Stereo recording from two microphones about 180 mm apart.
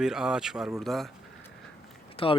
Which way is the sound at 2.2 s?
30° left (ahead or behind).